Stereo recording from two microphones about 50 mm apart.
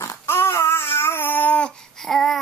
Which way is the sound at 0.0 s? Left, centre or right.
Left.